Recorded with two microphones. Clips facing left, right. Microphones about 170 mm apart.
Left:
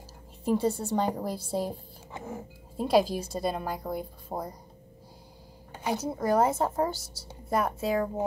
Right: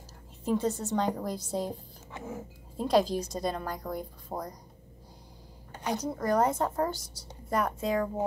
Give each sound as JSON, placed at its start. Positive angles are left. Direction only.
{"t": 0.5, "sound": "speech", "side_deg": 10}
{"t": 2.8, "sound": "speech", "side_deg": 5}
{"t": 5.7, "sound": "speech", "side_deg": 10}